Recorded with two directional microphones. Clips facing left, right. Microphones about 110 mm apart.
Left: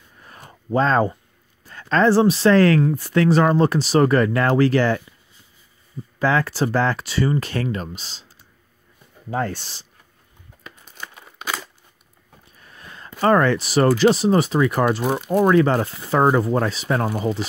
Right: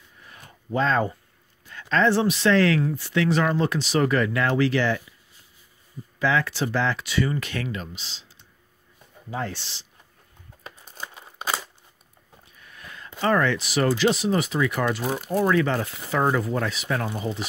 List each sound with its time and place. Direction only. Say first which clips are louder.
0.2 s a sound: left 5 dB; 40° left (ahead or behind)
1.6 s speech: left 4 dB; 40° left (ahead or behind)
6.1 s speech: left 3 dB; 40° left (ahead or behind)
9.3 s speech: left 6 dB; 45° left (ahead or behind)
10.6 s crumpling: even; 35° right (ahead or behind)
12.5 s a sound: left 1 dB; 35° left (ahead or behind)
13.2 s speech: left 5 dB; 45° left (ahead or behind)